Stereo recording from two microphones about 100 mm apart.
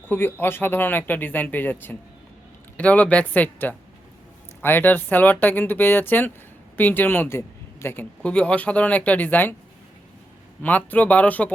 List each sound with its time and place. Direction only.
0.1 s a woman's voice: 20° left (ahead or behind)
8.2 s speech: 10° left (ahead or behind)
10.6 s speech: 15° left (ahead or behind)